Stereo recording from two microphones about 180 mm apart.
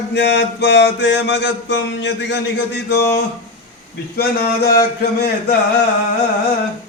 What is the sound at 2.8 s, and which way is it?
Speech, 65° left (ahead or behind).